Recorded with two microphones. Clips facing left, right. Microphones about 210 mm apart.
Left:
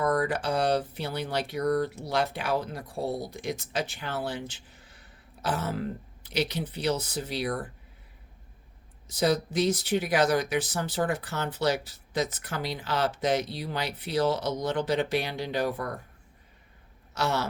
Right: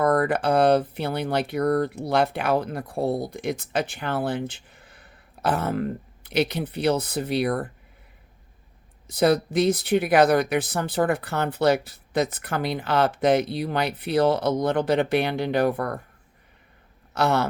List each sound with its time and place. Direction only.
0.0 s speech: 60° right (ahead or behind)
9.0 s speech: 55° right (ahead or behind)
17.2 s speech: 55° right (ahead or behind)